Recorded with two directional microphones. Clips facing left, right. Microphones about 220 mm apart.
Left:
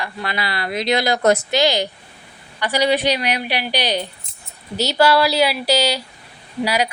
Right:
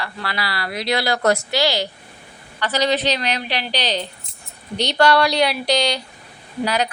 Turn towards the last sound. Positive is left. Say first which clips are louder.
# left 1 dB
turn(degrees=10)  # may be behind; listen again after turning